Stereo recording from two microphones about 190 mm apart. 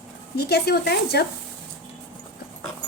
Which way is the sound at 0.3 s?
60° left (ahead or behind).